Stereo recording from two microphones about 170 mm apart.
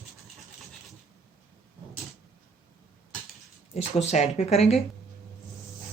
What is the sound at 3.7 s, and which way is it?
A woman's voice, 40° left (ahead or behind).